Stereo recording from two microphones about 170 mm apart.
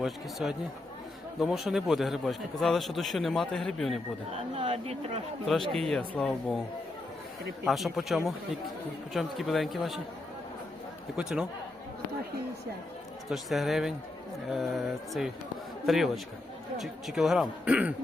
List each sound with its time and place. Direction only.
0.0 s a man's voice: centre (ahead or behind)
4.5 s speech: 35° right (ahead or behind)
5.5 s a man's voice: centre (ahead or behind)
7.6 s a man's voice: centre (ahead or behind)
11.2 s a man's voice: 5° right (ahead or behind)
13.3 s a man's voice: centre (ahead or behind)